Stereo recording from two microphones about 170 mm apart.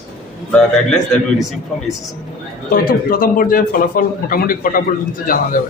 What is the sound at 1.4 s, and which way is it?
Speech, centre (ahead or behind).